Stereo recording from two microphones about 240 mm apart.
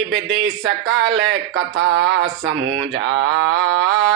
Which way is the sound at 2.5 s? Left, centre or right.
Right.